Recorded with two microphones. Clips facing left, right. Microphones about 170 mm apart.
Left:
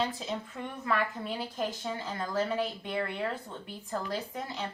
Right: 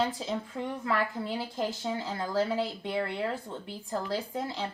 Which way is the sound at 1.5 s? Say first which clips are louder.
Right 2 dB; 25° right (ahead or behind).